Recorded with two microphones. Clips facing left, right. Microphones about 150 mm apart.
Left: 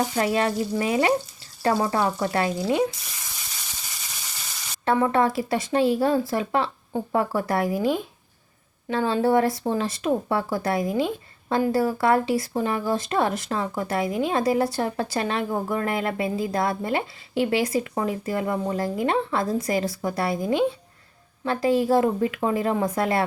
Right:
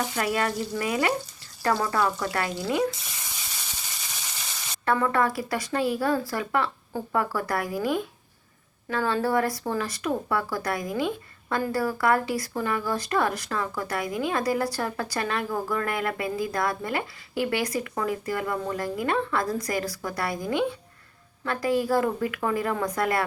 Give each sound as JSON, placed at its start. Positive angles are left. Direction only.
{"t": 0.0, "sound": "speech", "side_deg": 25}
{"t": 4.9, "sound": "speech", "side_deg": 25}